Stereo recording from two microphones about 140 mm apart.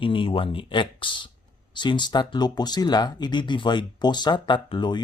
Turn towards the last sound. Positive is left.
turn(degrees=30)  # may be behind; listen again after turning